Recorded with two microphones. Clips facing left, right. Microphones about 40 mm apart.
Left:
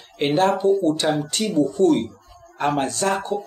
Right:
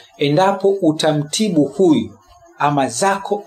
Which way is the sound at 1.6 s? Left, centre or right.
Right.